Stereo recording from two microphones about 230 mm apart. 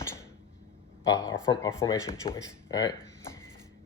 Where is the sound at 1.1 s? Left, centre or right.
Centre.